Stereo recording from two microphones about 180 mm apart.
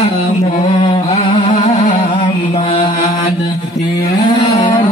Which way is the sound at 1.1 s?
30° left (ahead or behind).